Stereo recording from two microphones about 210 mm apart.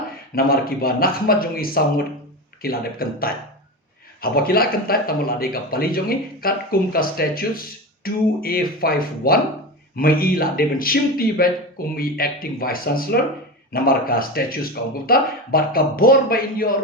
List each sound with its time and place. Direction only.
0.3 s speech: 45° left (ahead or behind)